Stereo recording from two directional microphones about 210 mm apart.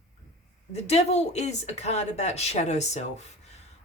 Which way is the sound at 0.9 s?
30° left (ahead or behind).